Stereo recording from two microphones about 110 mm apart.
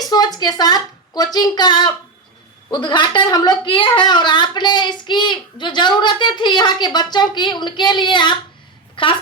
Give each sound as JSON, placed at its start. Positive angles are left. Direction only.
{"t": 0.0, "sound": "a woman's voice", "side_deg": 40}